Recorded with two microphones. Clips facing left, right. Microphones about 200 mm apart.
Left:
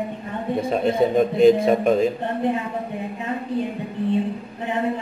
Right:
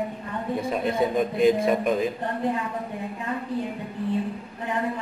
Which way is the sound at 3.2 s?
20° left (ahead or behind).